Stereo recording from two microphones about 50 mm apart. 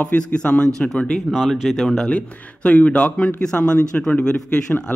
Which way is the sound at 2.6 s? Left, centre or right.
Left.